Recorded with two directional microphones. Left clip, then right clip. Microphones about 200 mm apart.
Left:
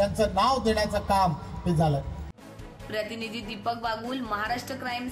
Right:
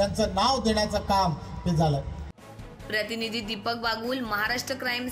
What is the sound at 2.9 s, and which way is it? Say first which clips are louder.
A woman's voice: right 3 dB; 10° right (ahead or behind).